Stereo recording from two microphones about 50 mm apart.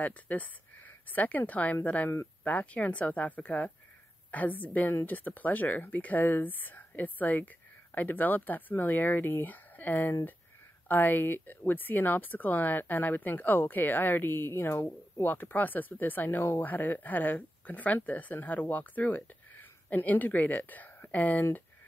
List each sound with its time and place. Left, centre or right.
0.0 s speech: left
15.2 s speech: left